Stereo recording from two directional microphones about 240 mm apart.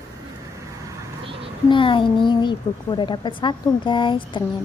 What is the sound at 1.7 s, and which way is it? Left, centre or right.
A woman's voice, left.